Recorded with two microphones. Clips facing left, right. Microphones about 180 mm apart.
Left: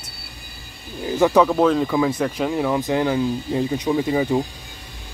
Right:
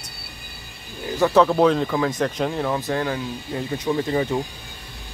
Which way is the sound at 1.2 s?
15° left (ahead or behind).